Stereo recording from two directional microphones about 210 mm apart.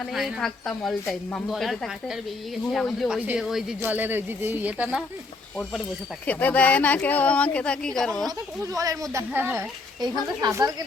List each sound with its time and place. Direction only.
0.1 s a woman's voice: centre (ahead or behind)
6.2 s speech: 5° left (ahead or behind)
8.6 s speech: 15° right (ahead or behind)